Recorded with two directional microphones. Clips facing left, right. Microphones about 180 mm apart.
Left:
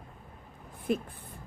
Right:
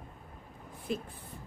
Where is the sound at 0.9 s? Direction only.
55° left (ahead or behind).